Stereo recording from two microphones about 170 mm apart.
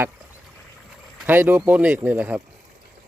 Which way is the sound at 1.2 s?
10° right (ahead or behind).